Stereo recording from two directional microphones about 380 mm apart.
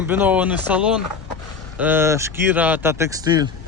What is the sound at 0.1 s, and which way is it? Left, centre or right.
Speech, centre.